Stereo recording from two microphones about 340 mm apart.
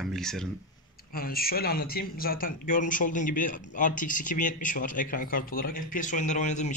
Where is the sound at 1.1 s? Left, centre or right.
Left.